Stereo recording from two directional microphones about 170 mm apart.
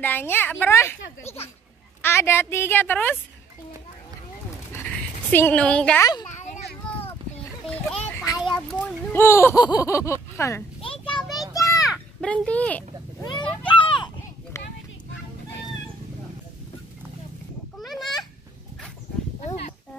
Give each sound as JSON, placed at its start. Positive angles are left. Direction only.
{"t": 0.0, "sound": "speech", "side_deg": 10}
{"t": 1.2, "sound": "speech", "side_deg": 35}
{"t": 2.0, "sound": "speech", "side_deg": 15}
{"t": 4.7, "sound": "dog", "side_deg": 10}
{"t": 7.7, "sound": "a sound", "side_deg": 10}
{"t": 8.5, "sound": "speech", "side_deg": 5}
{"t": 10.8, "sound": "children playing", "side_deg": 30}
{"t": 11.2, "sound": "a sound", "side_deg": 0}
{"t": 11.5, "sound": "children playing", "side_deg": 20}
{"t": 12.3, "sound": "speech", "side_deg": 10}
{"t": 13.2, "sound": "a sound", "side_deg": 25}
{"t": 13.7, "sound": "children playing", "side_deg": 30}
{"t": 17.7, "sound": "a sound", "side_deg": 0}